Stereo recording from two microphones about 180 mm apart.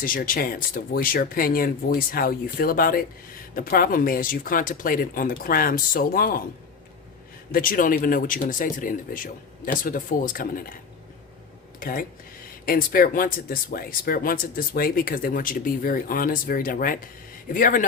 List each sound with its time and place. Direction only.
0.0 s speech: 50° left (ahead or behind)
7.5 s speech: 50° left (ahead or behind)
11.8 s speech: 50° left (ahead or behind)